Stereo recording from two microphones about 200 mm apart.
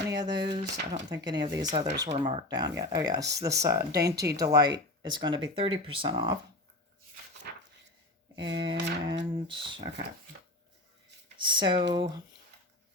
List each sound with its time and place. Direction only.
0.1 s speech: 20° right (ahead or behind)
7.5 s a sound: 50° right (ahead or behind)
8.4 s speech: 25° right (ahead or behind)
11.3 s speech: 25° right (ahead or behind)